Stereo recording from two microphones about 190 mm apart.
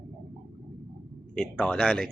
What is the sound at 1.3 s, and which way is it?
Speech, 5° left (ahead or behind).